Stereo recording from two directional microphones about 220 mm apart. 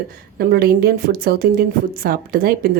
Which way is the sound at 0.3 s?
45° right (ahead or behind).